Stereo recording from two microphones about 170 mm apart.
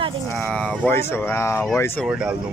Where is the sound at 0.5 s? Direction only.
5° left (ahead or behind).